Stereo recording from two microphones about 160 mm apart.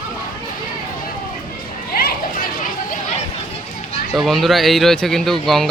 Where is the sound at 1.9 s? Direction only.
75° left (ahead or behind).